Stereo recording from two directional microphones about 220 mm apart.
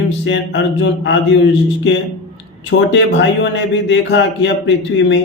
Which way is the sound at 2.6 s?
55° left (ahead or behind).